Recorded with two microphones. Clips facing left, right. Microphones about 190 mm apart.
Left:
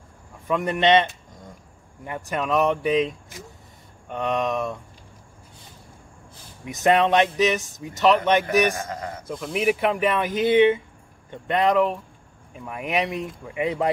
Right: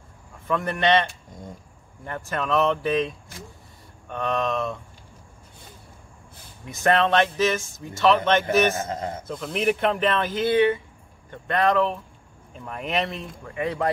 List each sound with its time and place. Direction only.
0.5 s speech: 15° left (ahead or behind)
4.1 s speech: 15° left (ahead or behind)
6.6 s speech: 20° left (ahead or behind)
8.7 s speech: 25° right (ahead or behind)
9.3 s speech: 10° left (ahead or behind)